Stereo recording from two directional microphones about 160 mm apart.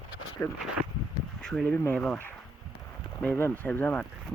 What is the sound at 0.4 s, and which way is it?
Speech, 15° left (ahead or behind).